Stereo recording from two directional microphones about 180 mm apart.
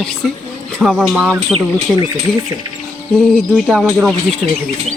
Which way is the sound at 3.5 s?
5° right (ahead or behind).